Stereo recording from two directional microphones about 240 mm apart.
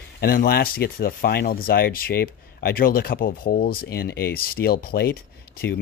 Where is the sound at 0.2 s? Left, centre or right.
Left.